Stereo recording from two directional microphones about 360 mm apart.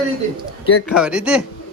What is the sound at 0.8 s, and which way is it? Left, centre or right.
Speech, centre.